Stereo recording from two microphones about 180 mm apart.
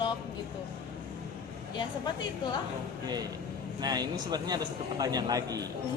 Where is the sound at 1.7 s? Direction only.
25° left (ahead or behind).